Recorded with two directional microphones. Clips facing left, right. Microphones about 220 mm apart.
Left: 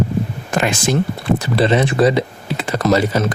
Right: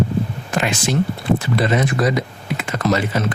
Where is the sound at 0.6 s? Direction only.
45° left (ahead or behind).